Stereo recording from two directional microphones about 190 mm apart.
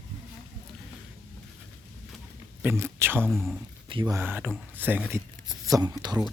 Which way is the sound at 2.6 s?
10° right (ahead or behind).